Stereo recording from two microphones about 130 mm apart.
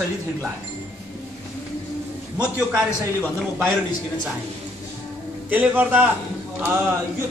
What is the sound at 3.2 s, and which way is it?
Speech, 5° right (ahead or behind).